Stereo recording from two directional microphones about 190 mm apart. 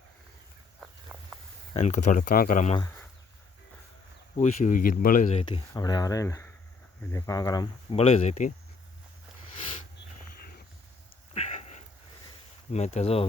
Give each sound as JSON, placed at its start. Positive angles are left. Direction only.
{"t": 1.7, "sound": "speech", "side_deg": 35}
{"t": 4.4, "sound": "speech", "side_deg": 40}
{"t": 11.3, "sound": "a sound", "side_deg": 35}
{"t": 12.7, "sound": "speech", "side_deg": 35}